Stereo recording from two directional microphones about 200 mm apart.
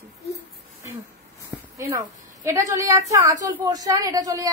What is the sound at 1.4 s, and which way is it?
A woman's voice, 15° right (ahead or behind).